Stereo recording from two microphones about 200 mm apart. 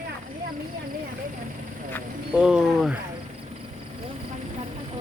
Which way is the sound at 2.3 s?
5° right (ahead or behind).